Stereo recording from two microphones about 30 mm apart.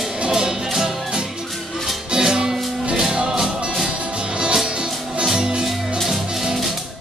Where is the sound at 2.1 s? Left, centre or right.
Right.